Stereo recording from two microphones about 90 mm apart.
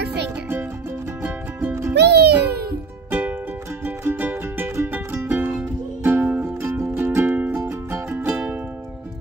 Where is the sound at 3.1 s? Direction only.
20° right (ahead or behind).